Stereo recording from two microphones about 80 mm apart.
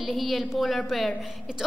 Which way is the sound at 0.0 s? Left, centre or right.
Centre.